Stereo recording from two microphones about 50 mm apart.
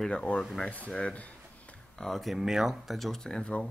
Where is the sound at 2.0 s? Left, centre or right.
Centre.